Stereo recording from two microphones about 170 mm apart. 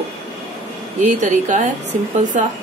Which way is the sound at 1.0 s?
45° right (ahead or behind).